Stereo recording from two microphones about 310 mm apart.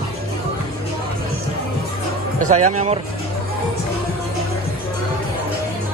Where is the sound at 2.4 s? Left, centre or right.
Right.